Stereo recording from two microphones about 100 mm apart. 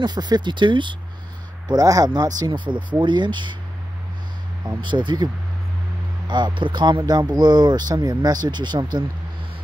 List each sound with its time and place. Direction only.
0.0 s speech: 45° right (ahead or behind)
1.7 s speech: 35° right (ahead or behind)
4.8 s speech: 50° right (ahead or behind)